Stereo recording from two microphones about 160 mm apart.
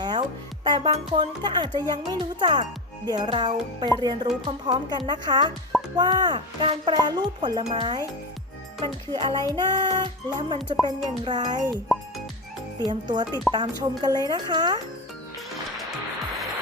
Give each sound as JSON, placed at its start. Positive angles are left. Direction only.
{"t": 0.0, "sound": "speech", "side_deg": -30}
{"t": 7.6, "sound": "speech", "side_deg": -40}
{"t": 8.8, "sound": "speech", "side_deg": -30}
{"t": 12.8, "sound": "speech", "side_deg": -30}